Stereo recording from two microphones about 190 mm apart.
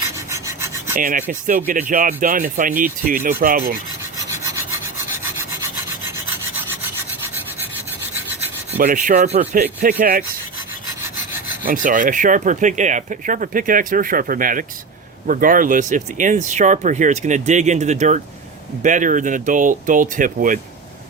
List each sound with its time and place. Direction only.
0.3 s filing: 15° right (ahead or behind)
0.9 s speech: 45° right (ahead or behind)
8.8 s speech: 45° right (ahead or behind)
10.0 s speech: 45° right (ahead or behind)
11.6 s speech: 45° right (ahead or behind)